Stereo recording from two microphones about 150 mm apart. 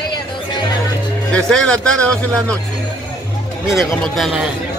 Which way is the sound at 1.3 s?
5° left (ahead or behind).